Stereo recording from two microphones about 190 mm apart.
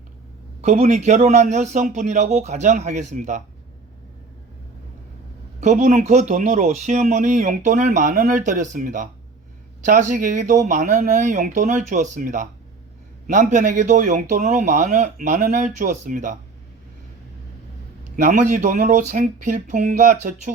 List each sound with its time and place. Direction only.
0.6 s speech: 35° right (ahead or behind)
5.5 s speech: 40° right (ahead or behind)
18.2 s speech: 40° right (ahead or behind)